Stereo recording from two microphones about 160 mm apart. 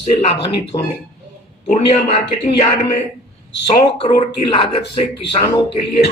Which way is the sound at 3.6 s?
35° left (ahead or behind).